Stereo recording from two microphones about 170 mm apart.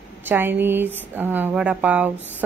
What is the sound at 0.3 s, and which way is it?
Speech, 10° right (ahead or behind).